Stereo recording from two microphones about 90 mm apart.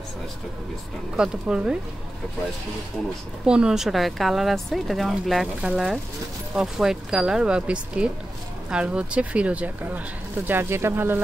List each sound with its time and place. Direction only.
1.1 s speech: 10° right (ahead or behind)
3.4 s speech: 10° right (ahead or behind)
5.6 s speech: 10° right (ahead or behind); by 11.1 s 25° right (ahead or behind)